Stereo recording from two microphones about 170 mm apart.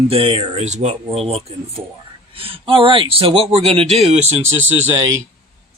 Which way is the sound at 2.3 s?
30° right (ahead or behind).